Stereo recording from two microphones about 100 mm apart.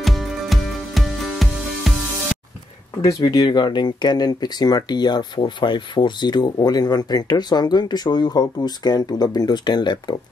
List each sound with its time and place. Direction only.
0.0 s music: centre (ahead or behind)
3.0 s speech: 35° left (ahead or behind)